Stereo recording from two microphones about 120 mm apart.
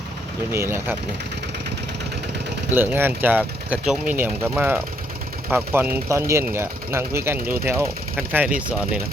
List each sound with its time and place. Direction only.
0.5 s speech: 20° right (ahead or behind)
2.7 s speech: 15° right (ahead or behind)